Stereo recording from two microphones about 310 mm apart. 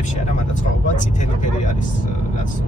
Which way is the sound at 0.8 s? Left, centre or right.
Left.